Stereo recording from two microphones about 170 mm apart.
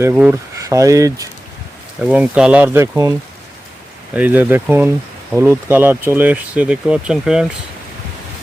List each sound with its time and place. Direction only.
0.0 s speech: 10° right (ahead or behind)
2.0 s speech: 10° right (ahead or behind)